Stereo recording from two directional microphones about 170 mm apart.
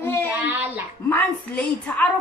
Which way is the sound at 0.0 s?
15° left (ahead or behind).